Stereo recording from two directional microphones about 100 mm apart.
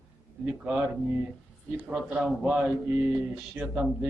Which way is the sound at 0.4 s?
10° right (ahead or behind).